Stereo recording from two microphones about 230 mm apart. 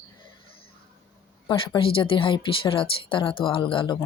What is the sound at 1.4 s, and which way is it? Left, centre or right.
Speech, left.